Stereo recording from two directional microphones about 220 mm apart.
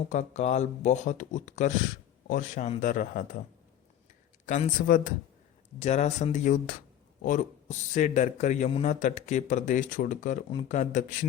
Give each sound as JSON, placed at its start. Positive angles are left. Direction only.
{"t": 0.1, "sound": "a man's voice", "side_deg": 30}
{"t": 4.4, "sound": "a man's voice", "side_deg": 35}